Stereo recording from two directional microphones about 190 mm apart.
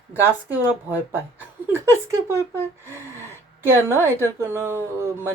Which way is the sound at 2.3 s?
15° right (ahead or behind).